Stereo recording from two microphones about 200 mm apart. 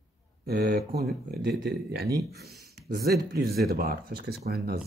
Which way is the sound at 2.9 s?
50° right (ahead or behind).